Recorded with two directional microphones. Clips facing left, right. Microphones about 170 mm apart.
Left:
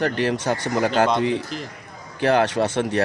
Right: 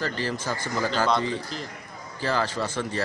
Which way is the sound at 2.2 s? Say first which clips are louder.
Left 8 dB; 70° left (ahead or behind).